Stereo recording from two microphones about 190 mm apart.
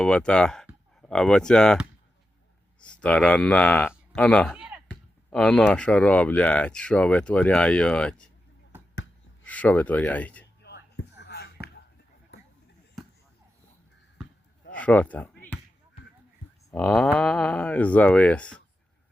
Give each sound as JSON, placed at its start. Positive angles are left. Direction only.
{"t": 0.0, "sound": "speech", "side_deg": 5}
{"t": 2.8, "sound": "speech", "side_deg": 5}
{"t": 4.5, "sound": "a sound", "side_deg": -5}
{"t": 4.9, "sound": "speech", "side_deg": 5}
{"t": 9.4, "sound": "speech", "side_deg": 10}
{"t": 10.6, "sound": "a sound", "side_deg": 60}
{"t": 13.0, "sound": "basketball bounce", "side_deg": 0}
{"t": 14.7, "sound": "a sound", "side_deg": 5}
{"t": 16.7, "sound": "speech", "side_deg": 5}